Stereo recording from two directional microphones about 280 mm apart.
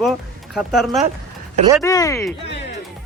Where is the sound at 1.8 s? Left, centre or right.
Centre.